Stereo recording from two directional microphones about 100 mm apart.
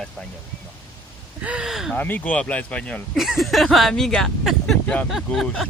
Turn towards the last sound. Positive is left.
turn(degrees=0)  # may be behind; listen again after turning